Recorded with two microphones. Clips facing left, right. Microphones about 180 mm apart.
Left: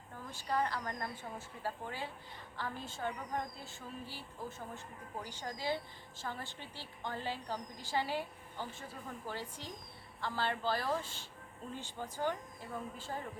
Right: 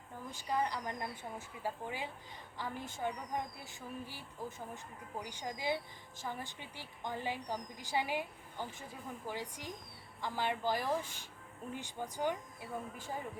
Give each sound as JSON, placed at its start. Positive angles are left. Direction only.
{"t": 0.3, "sound": "a woman's voice", "side_deg": -15}